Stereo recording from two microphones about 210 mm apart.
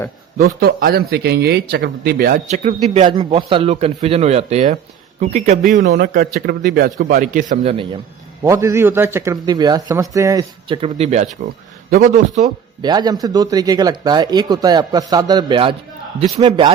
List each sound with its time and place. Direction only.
0.3 s a man's voice: 45° right (ahead or behind); by 7.9 s 25° right (ahead or behind)
8.4 s speech: 15° right (ahead or behind); by 12.5 s 35° right (ahead or behind)
12.8 s speech: 20° right (ahead or behind)